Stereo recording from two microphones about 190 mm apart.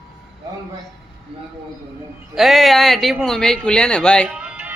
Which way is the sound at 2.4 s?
Centre (ahead or behind).